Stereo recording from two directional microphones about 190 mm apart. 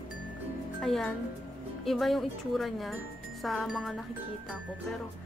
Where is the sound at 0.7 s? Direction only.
Centre (ahead or behind).